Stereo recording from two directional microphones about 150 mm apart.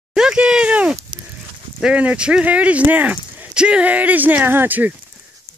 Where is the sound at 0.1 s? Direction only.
5° right (ahead or behind).